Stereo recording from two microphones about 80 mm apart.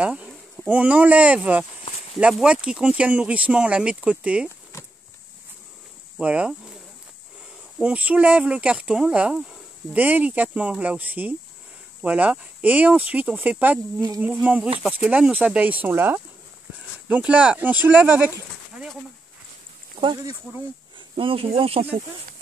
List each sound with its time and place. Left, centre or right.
0.0 s speech: centre
6.1 s speech: centre
7.8 s speech: centre
20.0 s speech: right